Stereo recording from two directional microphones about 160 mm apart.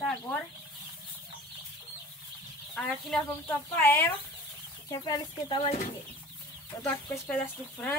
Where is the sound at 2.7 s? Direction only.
Centre (ahead or behind).